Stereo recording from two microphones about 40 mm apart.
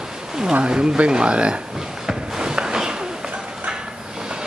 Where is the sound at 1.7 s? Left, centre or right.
Centre.